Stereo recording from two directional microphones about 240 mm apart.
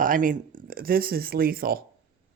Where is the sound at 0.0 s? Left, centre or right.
Right.